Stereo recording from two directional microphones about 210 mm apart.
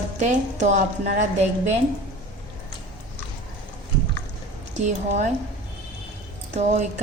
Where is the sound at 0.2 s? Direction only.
35° right (ahead or behind).